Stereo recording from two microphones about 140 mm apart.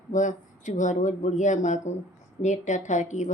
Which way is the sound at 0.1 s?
65° left (ahead or behind).